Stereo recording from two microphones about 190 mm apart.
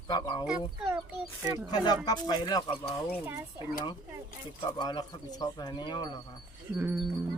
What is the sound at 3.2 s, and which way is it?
Speech, 10° right (ahead or behind).